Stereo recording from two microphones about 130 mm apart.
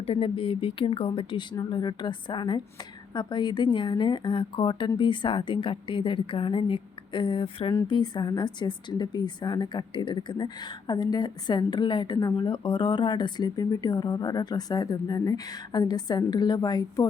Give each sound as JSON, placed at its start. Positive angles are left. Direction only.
{"t": 0.0, "sound": "speech", "side_deg": 45}